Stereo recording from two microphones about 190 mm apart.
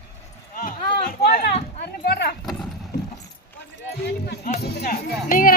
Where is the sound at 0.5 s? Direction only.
50° left (ahead or behind).